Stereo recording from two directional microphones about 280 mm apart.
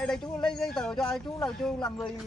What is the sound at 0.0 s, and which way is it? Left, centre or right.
Speech, centre.